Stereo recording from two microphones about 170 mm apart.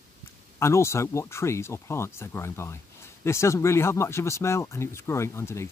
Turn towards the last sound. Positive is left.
turn(degrees=15)  # may be behind; listen again after turning